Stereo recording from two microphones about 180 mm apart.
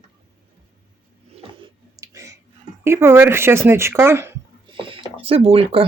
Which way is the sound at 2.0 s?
15° right (ahead or behind).